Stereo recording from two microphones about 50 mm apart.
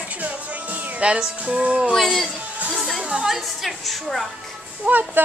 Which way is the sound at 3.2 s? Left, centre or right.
Centre.